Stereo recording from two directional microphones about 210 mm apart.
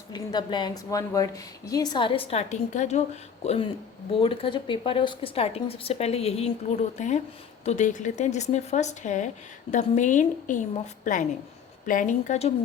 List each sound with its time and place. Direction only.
0.1 s a woman's voice: 20° left (ahead or behind)